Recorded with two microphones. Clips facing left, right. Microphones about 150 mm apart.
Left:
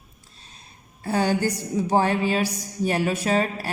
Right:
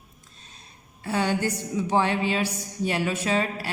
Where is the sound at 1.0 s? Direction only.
40° left (ahead or behind).